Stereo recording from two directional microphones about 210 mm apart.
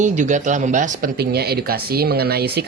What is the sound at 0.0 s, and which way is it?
Speech, 35° right (ahead or behind).